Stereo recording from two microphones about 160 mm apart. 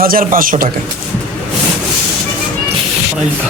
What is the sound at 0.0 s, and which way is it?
Speech, 60° right (ahead or behind).